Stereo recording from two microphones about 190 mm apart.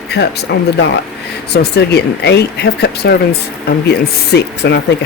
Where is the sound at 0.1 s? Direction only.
60° left (ahead or behind).